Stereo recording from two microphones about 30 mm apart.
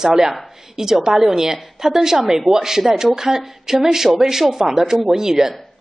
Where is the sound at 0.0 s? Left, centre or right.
Centre.